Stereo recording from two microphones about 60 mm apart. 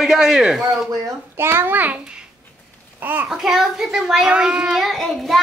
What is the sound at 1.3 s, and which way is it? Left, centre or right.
Speech, right.